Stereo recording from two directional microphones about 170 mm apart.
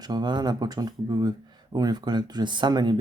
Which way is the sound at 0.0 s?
25° right (ahead or behind).